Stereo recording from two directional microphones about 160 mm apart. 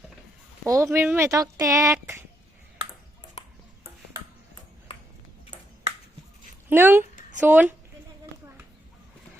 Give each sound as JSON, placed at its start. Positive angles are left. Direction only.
{"t": 0.6, "sound": "speech", "side_deg": -20}
{"t": 6.7, "sound": "speech", "side_deg": -15}